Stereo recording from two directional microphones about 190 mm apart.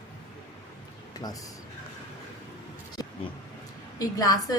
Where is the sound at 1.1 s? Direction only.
20° left (ahead or behind).